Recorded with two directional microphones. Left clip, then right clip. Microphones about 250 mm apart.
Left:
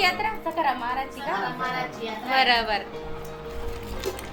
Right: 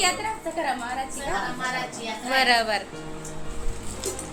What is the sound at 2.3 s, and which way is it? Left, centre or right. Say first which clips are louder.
Speech: even; centre.